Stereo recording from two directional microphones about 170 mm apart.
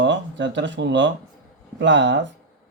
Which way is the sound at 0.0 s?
90° right.